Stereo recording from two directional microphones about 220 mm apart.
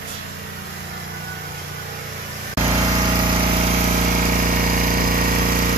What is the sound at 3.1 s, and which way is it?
Jackhammer, 20° right (ahead or behind).